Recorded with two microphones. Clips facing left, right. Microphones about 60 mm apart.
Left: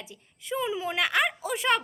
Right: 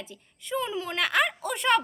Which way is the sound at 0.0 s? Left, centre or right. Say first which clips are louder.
Right 2 dB; centre.